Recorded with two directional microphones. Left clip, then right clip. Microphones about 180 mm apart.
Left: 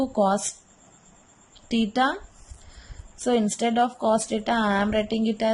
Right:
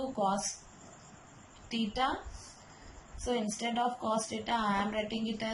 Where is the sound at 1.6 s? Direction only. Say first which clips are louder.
Left 9 dB; 60° left (ahead or behind).